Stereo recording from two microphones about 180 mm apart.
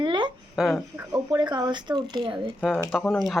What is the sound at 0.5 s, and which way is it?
Speech, 5° right (ahead or behind).